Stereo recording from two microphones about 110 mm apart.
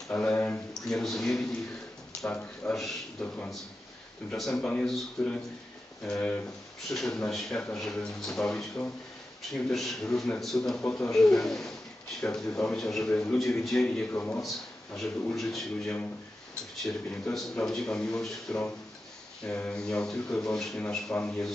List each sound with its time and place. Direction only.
0.1 s a man's voice: 10° left (ahead or behind)
2.7 s a man's voice: centre (ahead or behind)
10.8 s speech: 15° left (ahead or behind)
11.1 s a man's voice: 5° left (ahead or behind)
14.1 s speech: 15° left (ahead or behind)
15.0 s a man's voice: 5° left (ahead or behind)